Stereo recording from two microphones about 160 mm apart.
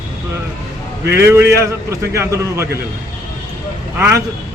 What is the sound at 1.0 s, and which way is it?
Speech, 90° right.